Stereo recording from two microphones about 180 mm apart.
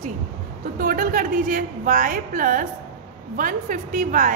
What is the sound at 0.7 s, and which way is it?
A woman's voice, 50° right (ahead or behind).